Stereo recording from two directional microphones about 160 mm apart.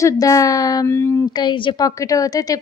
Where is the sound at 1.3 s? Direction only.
30° left (ahead or behind).